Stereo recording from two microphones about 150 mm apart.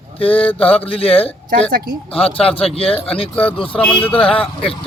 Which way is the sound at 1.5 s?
70° right (ahead or behind).